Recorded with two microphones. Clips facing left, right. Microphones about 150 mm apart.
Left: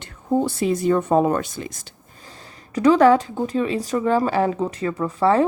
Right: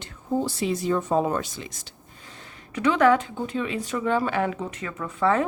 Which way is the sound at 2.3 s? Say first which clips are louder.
Left 6 dB; 35° left (ahead or behind).